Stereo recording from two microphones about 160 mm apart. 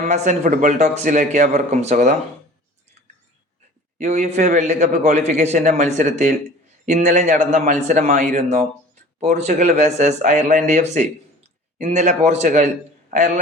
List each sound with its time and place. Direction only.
0.0 s a man's voice: 50° right (ahead or behind)
3.9 s a man's voice: 50° right (ahead or behind)